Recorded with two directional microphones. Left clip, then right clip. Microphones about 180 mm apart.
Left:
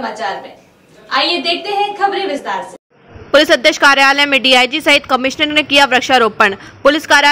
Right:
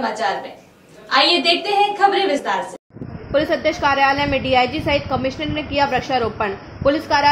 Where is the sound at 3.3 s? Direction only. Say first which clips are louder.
Left 9 dB; 45° left (ahead or behind).